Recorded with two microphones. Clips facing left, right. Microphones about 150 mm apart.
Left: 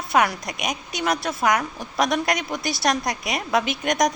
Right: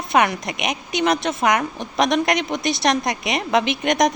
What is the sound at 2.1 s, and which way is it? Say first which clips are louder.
A woman's voice: right 4 dB; centre (ahead or behind).